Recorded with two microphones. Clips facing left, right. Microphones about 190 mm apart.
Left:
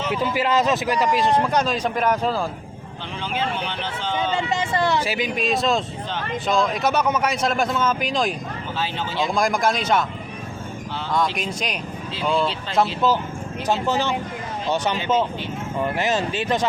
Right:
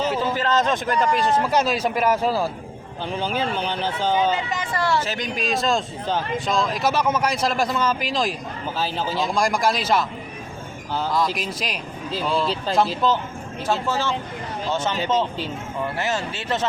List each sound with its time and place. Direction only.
0.2 s a man's voice: 10° left (ahead or behind); by 2.5 s 10° right (ahead or behind)
3.2 s speech: 40° right (ahead or behind)
4.5 s a man's voice: 25° left (ahead or behind); by 8.4 s centre (ahead or behind)
8.8 s speech: 40° right (ahead or behind)
9.2 s a man's voice: centre (ahead or behind)
11.3 s a man's voice: centre (ahead or behind)
13.7 s speech: 20° left (ahead or behind)